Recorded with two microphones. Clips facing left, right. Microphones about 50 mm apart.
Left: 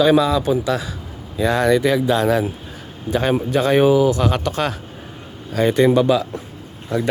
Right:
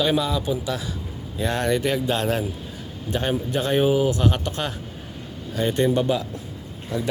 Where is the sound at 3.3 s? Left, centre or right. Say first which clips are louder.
Left 6 dB; left.